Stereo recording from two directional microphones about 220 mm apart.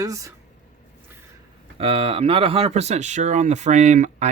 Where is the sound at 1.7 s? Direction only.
25° right (ahead or behind).